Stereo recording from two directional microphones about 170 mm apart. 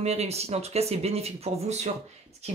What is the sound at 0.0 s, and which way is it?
Speech, 40° right (ahead or behind).